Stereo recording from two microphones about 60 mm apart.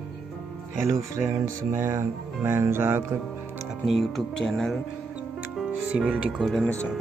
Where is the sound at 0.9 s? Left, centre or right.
Right.